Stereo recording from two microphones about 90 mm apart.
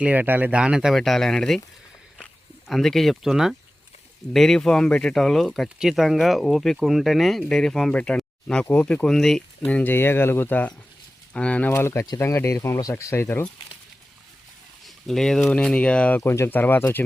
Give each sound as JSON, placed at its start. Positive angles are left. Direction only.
{"t": 0.0, "sound": "speech", "side_deg": -20}
{"t": 0.9, "sound": "speech", "side_deg": 0}
{"t": 2.6, "sound": "speech", "side_deg": 0}
{"t": 9.7, "sound": "speech", "side_deg": 25}
{"t": 11.7, "sound": "speech", "side_deg": 30}
{"t": 14.8, "sound": "speech", "side_deg": 5}